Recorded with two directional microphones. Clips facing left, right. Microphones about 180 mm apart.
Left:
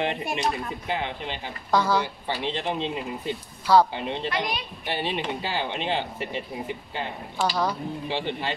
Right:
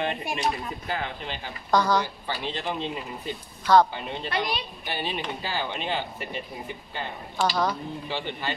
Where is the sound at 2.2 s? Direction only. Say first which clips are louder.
Left 3 dB; 20° left (ahead or behind).